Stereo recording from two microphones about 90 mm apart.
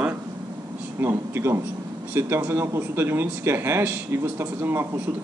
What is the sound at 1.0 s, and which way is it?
Speech, 30° right (ahead or behind).